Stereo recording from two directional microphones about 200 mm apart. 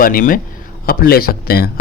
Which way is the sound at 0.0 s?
45° left (ahead or behind).